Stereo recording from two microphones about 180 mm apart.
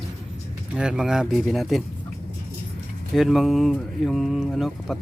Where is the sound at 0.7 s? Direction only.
5° right (ahead or behind).